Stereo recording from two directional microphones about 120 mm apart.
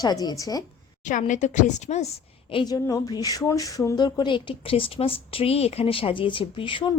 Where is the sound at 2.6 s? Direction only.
30° left (ahead or behind).